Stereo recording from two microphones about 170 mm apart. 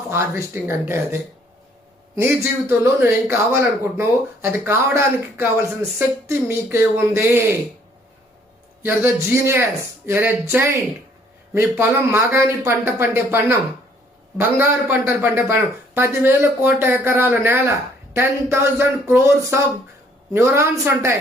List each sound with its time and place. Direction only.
0.1 s a man's voice: 15° right (ahead or behind)
8.8 s a man's voice: 10° right (ahead or behind)